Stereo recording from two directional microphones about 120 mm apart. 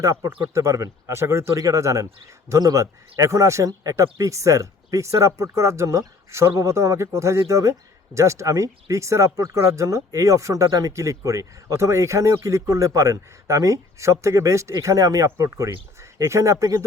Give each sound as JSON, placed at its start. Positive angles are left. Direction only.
{"t": 0.0, "sound": "speech", "side_deg": -25}